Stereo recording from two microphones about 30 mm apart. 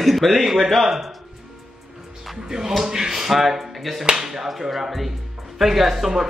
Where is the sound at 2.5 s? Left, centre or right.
Centre.